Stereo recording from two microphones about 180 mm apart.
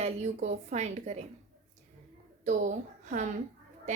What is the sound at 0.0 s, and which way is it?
A woman's voice, 40° right (ahead or behind).